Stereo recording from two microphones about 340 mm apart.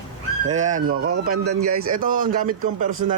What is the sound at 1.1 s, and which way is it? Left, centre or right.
Speech, right.